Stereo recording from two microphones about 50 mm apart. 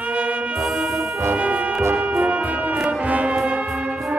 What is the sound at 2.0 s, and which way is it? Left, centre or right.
Music, right.